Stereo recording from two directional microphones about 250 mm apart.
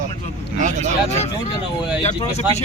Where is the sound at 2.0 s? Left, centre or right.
Left.